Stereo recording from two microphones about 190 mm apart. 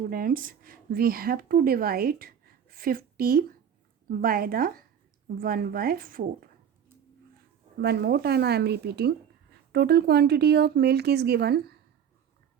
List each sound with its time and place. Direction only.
0.1 s a woman's voice: 50° right (ahead or behind)
7.8 s speech: 60° right (ahead or behind)